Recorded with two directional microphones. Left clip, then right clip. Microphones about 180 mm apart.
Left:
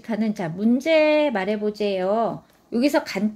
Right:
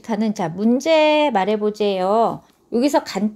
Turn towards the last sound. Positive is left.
turn(degrees=-30)  # may be behind; listen again after turning